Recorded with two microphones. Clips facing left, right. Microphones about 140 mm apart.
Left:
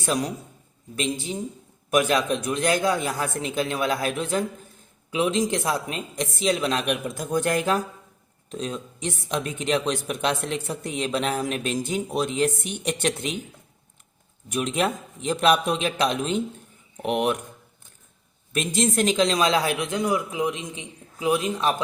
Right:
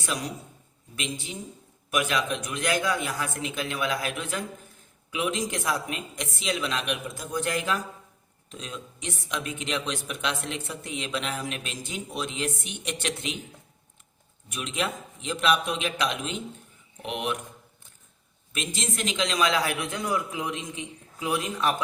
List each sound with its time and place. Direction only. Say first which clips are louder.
0.9 s a woman's voice: left 7 dB; 35° left (ahead or behind)
14.5 s a woman's voice: left 6 dB; 45° left (ahead or behind)
18.5 s speech: left 9 dB; 45° left (ahead or behind); by 21.8 s 20° left (ahead or behind)